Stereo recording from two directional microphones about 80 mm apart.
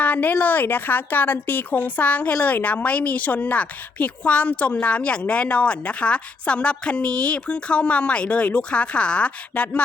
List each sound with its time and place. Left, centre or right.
0.0 s speech: centre